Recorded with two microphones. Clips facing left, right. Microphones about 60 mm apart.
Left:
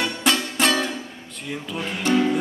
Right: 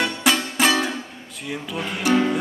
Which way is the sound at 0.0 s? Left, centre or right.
Centre.